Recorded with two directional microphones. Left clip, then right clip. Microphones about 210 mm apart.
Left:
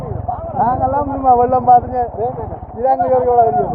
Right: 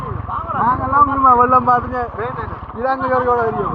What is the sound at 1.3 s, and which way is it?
Speech, 30° right (ahead or behind).